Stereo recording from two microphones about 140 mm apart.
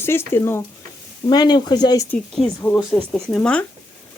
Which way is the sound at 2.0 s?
5° left (ahead or behind).